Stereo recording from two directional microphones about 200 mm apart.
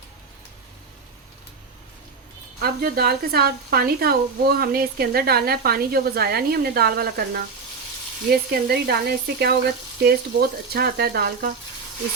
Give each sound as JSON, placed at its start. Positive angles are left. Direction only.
{"t": 2.6, "sound": "speech", "side_deg": -50}